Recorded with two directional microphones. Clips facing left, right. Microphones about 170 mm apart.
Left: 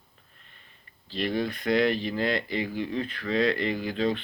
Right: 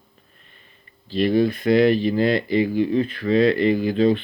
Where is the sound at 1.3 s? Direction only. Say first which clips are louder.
Right 10 dB; 35° right (ahead or behind).